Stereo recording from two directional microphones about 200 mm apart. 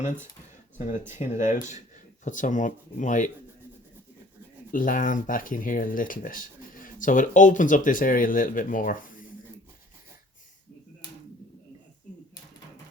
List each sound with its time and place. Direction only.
1.1 s speech: 35° left (ahead or behind)
4.7 s speech: 45° left (ahead or behind)